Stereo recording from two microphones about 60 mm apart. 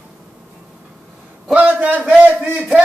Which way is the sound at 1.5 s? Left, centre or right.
Right.